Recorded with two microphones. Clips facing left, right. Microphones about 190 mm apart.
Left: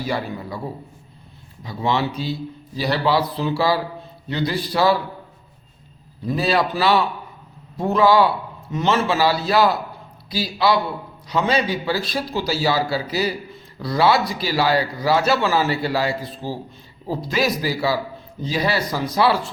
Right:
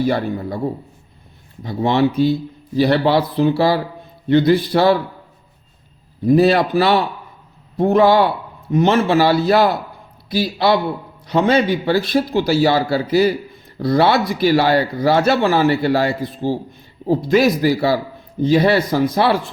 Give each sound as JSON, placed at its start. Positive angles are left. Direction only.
{"t": 0.1, "sound": "speech", "side_deg": -55}
{"t": 1.6, "sound": "speech", "side_deg": -55}
{"t": 6.2, "sound": "a man's voice", "side_deg": -60}
{"t": 16.2, "sound": "a man's voice", "side_deg": -20}
{"t": 17.2, "sound": "speech", "side_deg": -55}